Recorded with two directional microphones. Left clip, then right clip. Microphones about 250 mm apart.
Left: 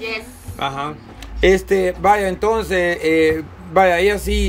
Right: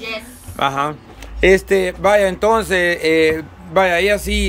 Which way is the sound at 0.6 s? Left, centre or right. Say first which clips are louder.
Right 5 dB; centre.